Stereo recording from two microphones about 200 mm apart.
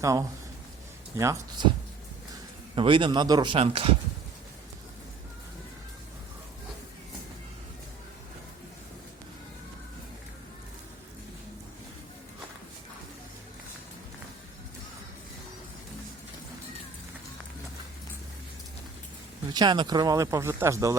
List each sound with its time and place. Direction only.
0.0 s speech: 15° right (ahead or behind)
2.7 s speech: 25° right (ahead or behind)
19.5 s speech: 20° right (ahead or behind)